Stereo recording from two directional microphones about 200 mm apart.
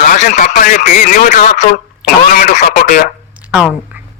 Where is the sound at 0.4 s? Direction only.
45° left (ahead or behind).